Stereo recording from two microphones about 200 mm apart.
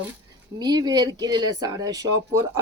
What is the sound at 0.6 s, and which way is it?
Speech, 20° right (ahead or behind).